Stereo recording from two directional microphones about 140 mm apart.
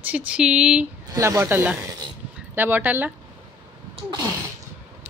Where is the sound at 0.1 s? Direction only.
10° right (ahead or behind).